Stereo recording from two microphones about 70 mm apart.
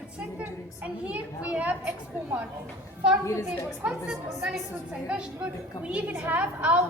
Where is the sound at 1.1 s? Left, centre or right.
Right.